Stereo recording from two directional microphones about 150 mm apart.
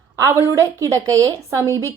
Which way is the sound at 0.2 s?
20° right (ahead or behind).